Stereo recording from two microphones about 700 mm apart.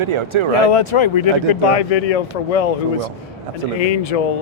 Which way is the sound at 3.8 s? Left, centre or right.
Left.